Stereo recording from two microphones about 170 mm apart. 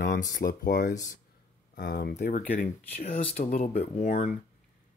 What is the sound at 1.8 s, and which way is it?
Speech, 65° left (ahead or behind).